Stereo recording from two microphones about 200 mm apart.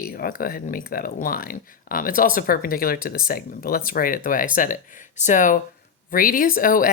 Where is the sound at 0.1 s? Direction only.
45° left (ahead or behind).